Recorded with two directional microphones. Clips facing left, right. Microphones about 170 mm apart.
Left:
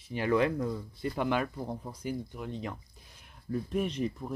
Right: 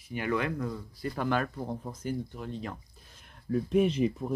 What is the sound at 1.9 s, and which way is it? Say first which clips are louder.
Speech: right 2 dB; 10° left (ahead or behind).